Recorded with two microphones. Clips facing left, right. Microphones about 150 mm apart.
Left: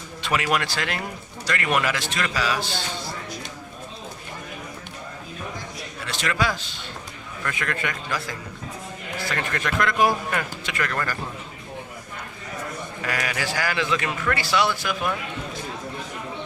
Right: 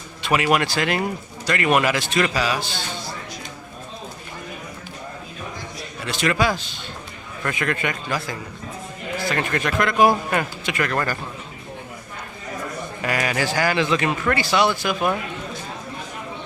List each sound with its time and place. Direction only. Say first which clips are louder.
0.2 s a man's voice: right 4 dB; 15° right (ahead or behind)
6.1 s a man's voice: right 5 dB; 15° right (ahead or behind)
9.3 s a man's voice: right 3 dB; 20° right (ahead or behind)
13.1 s a man's voice: right 5 dB; 20° right (ahead or behind)